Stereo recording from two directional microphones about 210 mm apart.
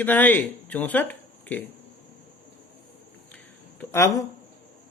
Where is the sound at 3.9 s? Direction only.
15° left (ahead or behind).